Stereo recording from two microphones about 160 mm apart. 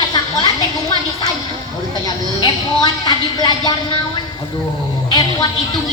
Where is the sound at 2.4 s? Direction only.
25° left (ahead or behind).